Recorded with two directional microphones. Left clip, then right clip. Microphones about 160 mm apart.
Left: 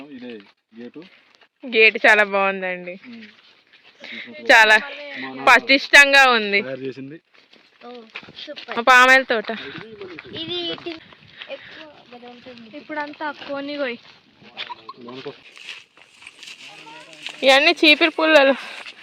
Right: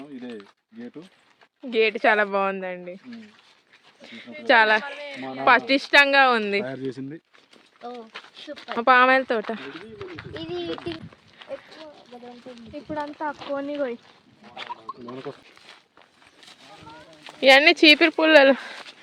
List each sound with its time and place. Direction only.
1.7 s speech: centre (ahead or behind)
4.0 s speech: centre (ahead or behind)
6.7 s speech: 75° right (ahead or behind)
8.4 s speech: 15° right (ahead or behind)
8.7 s speech: centre (ahead or behind)
10.2 s speech: 5° left (ahead or behind)
11.6 s a sound: centre (ahead or behind)
13.1 s speech: 5° left (ahead or behind)
13.5 s speech: 15° left (ahead or behind)
14.6 s bird: 30° right (ahead or behind)
15.7 s a sound: 40° right (ahead or behind)
17.3 s speech: 10° right (ahead or behind)